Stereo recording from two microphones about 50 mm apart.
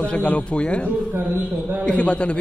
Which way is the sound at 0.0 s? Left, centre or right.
Left.